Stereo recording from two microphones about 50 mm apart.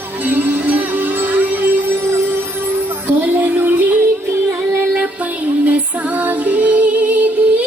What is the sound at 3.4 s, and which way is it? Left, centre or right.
Music, right.